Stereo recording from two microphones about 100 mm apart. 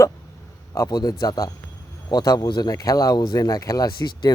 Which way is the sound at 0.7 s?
35° left (ahead or behind).